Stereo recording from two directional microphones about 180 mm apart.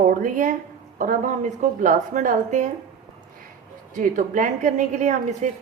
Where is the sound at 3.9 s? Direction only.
45° right (ahead or behind).